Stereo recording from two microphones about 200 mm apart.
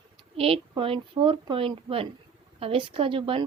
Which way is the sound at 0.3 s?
30° right (ahead or behind).